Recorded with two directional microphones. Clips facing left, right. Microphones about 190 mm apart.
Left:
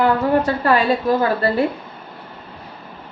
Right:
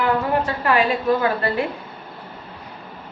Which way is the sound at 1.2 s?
35° left (ahead or behind).